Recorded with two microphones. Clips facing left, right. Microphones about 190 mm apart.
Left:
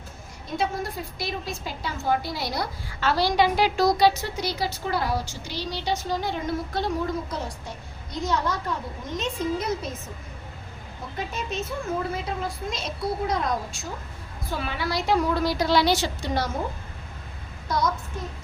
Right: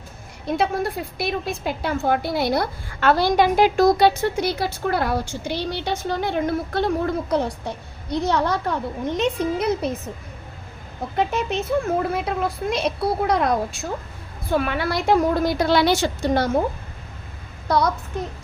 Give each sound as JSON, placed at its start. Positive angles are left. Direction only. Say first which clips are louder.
{"t": 0.4, "sound": "a woman's voice", "louder": "right 6 dB", "side_deg": -65}
{"t": 11.2, "sound": "a woman's voice", "louder": "right 8 dB", "side_deg": -65}
{"t": 17.7, "sound": "a child's voice", "louder": "right 5 dB", "side_deg": -65}